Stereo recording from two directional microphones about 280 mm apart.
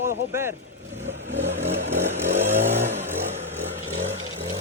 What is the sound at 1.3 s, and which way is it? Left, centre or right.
Vehicle, right.